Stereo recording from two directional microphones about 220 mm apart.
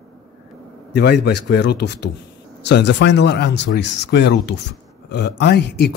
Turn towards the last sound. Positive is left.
turn(degrees=50)  # may be behind; listen again after turning